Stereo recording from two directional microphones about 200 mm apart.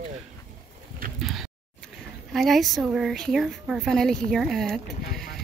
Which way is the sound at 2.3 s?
Centre (ahead or behind).